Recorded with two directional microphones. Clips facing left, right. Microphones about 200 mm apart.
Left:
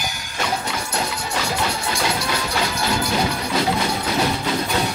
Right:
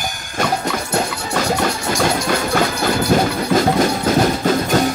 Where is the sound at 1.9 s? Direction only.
50° right (ahead or behind).